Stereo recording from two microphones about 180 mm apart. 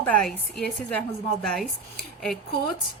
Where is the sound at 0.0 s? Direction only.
5° left (ahead or behind).